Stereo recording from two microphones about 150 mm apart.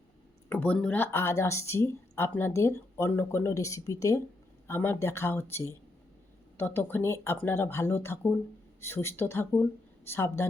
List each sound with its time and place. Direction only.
0.4 s speech: 10° left (ahead or behind)